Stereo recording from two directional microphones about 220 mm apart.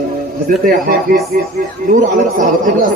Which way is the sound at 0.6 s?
40° right (ahead or behind).